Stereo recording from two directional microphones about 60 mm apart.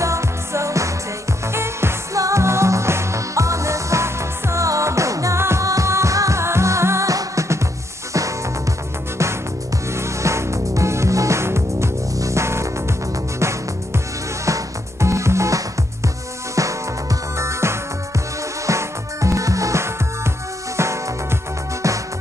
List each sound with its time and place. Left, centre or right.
0.0 s music: right
1.5 s music: right
2.1 s music: right
5.4 s music: right
5.7 s music: right
7.1 s music: right
9.9 s music: right
14.4 s music: right